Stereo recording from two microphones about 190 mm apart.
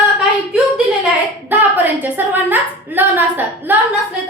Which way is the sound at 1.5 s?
10° right (ahead or behind).